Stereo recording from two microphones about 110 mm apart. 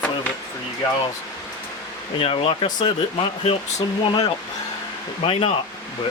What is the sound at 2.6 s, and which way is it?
Speech, 40° left (ahead or behind).